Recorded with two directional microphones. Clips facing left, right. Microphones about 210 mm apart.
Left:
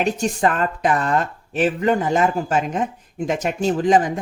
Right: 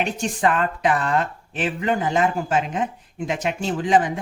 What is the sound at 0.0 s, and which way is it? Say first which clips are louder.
Speech: left 3 dB; 40° left (ahead or behind).